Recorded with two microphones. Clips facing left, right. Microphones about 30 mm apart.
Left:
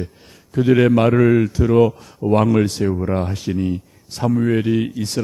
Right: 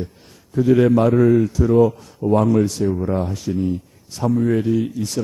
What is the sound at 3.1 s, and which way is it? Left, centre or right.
Speech, left.